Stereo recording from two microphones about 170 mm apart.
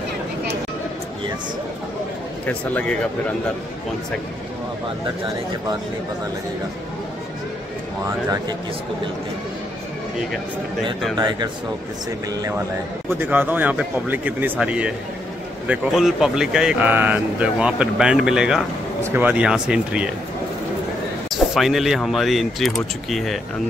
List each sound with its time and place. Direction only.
2.4 s speech: 10° left (ahead or behind)
11.1 s speech: 25° right (ahead or behind)
13.2 s speech: 10° right (ahead or behind)
21.3 s speech: centre (ahead or behind)